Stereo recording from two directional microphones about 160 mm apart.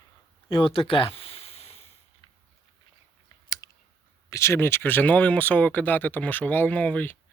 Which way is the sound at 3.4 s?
25° left (ahead or behind).